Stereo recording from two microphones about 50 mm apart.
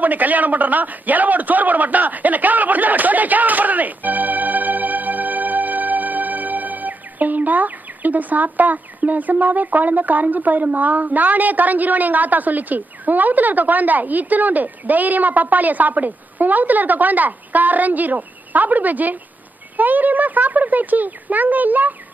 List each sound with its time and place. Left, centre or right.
0.0 s a man's voice: right